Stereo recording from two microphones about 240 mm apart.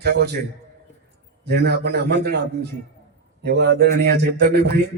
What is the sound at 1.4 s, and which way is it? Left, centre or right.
A man's voice, right.